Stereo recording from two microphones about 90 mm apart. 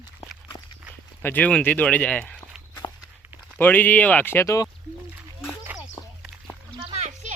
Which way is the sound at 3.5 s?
20° left (ahead or behind).